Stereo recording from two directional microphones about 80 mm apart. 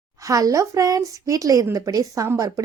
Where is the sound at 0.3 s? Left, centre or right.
Right.